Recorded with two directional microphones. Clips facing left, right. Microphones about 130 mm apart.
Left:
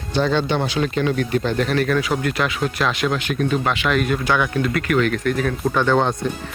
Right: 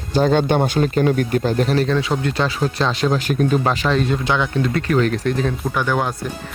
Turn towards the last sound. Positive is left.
turn(degrees=-10)  # may be behind; listen again after turning